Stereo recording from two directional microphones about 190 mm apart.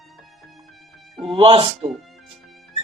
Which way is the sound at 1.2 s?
25° right (ahead or behind).